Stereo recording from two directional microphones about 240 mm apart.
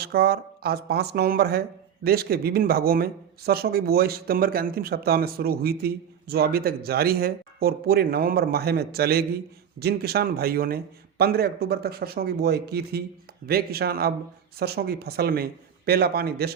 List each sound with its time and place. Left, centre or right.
0.0 s speech: right